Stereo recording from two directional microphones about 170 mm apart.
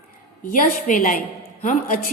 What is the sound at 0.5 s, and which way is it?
Speech, 55° left (ahead or behind).